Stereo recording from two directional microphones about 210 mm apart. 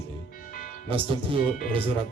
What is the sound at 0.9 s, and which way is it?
Speech, 25° right (ahead or behind).